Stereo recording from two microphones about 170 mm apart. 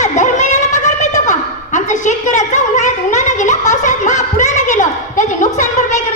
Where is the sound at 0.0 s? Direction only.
45° left (ahead or behind).